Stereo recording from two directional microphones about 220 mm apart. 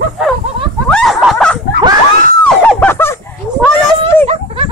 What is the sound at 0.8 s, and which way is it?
Snicker, 5° left (ahead or behind).